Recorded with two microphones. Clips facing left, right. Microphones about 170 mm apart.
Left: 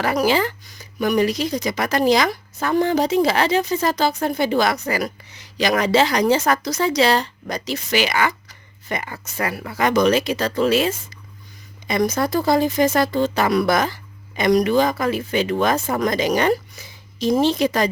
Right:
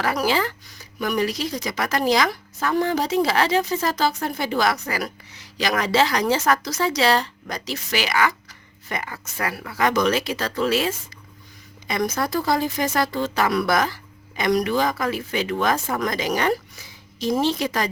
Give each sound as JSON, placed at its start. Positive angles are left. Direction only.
{"t": 0.0, "sound": "speech", "side_deg": 20}